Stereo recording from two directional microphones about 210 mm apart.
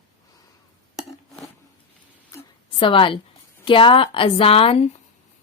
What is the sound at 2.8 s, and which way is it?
A woman's voice, 25° left (ahead or behind).